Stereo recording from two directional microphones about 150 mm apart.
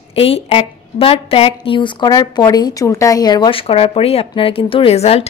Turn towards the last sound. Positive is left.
turn(degrees=45)  # may be behind; listen again after turning